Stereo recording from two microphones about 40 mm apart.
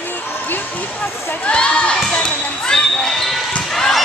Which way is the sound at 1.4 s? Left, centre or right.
Left.